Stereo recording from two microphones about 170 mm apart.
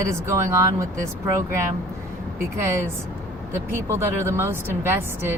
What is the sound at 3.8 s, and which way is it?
Speech, 15° right (ahead or behind).